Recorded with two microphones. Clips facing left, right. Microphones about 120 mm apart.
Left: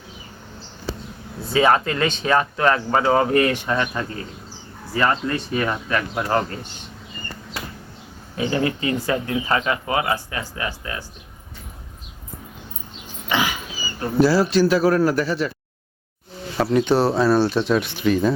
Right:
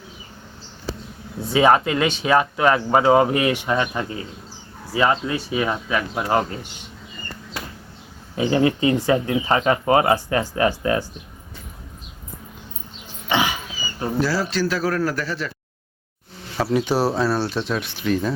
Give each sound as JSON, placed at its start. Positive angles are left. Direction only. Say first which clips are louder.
{"t": 1.5, "sound": "speech", "louder": "right 1 dB", "side_deg": -15}
{"t": 8.4, "sound": "speech", "louder": "right 4 dB", "side_deg": -25}
{"t": 13.2, "sound": "dog", "louder": "right 1 dB", "side_deg": -25}
{"t": 14.5, "sound": "a man's voice", "louder": "left 6 dB", "side_deg": 20}
{"t": 16.6, "sound": "speech", "louder": "left 2 dB", "side_deg": -5}